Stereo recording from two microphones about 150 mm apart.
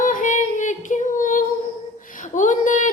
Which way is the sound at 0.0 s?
60° left (ahead or behind).